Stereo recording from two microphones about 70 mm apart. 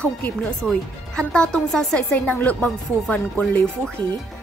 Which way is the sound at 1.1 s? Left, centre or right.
Centre.